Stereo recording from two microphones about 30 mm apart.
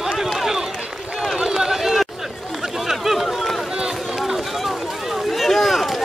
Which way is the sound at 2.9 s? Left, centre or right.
Centre.